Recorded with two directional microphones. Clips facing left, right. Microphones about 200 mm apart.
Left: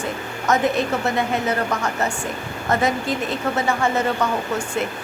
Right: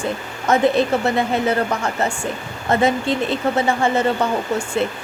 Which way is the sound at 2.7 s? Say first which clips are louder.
Right 3 dB; 30° right (ahead or behind).